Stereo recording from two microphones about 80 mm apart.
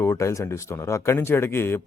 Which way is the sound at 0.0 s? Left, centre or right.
Left.